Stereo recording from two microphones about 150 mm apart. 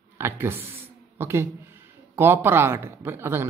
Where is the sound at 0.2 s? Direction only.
15° right (ahead or behind).